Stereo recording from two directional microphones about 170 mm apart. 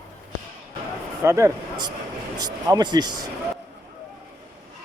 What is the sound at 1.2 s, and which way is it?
A man's voice, 15° right (ahead or behind).